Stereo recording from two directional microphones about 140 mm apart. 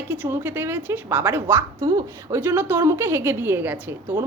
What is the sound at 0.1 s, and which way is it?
A woman's voice, 15° right (ahead or behind).